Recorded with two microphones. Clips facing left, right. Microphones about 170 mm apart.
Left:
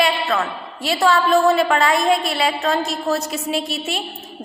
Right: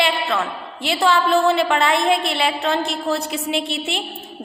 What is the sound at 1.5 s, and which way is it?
A woman's voice, 25° right (ahead or behind).